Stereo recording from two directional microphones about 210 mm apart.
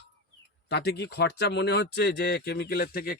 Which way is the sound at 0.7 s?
50° left (ahead or behind).